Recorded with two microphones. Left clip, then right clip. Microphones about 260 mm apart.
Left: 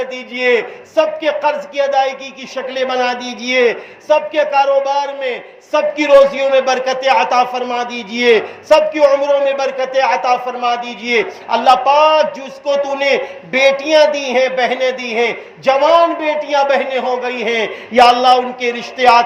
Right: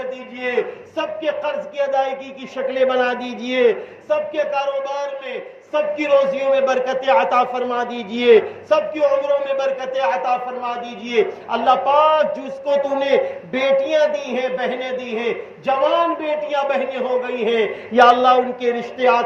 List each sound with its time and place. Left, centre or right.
0.9 s a man's voice: left